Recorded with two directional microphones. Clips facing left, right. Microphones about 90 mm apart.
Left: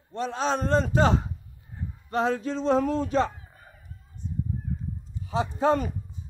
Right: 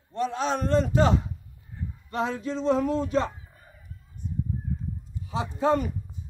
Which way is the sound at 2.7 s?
50° left (ahead or behind).